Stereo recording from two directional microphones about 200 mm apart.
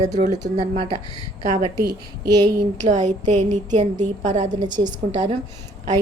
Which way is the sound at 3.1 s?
35° right (ahead or behind).